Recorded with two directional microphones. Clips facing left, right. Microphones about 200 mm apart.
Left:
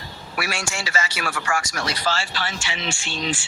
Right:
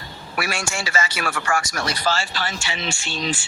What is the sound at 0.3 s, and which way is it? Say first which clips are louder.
A man's voice: right 2 dB; 50° right (ahead or behind).